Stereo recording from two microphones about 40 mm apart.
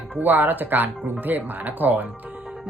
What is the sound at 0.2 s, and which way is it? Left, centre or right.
A woman's voice, right.